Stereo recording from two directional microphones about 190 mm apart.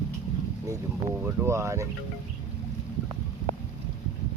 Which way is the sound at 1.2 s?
15° right (ahead or behind).